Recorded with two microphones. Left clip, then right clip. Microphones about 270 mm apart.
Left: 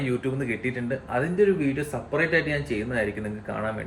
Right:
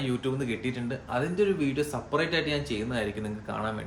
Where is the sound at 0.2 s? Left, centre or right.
Centre.